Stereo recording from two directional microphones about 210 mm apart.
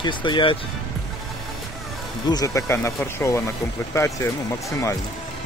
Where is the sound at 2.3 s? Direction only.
15° left (ahead or behind).